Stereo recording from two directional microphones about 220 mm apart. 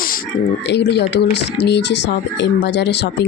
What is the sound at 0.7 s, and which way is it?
Speech, 50° left (ahead or behind).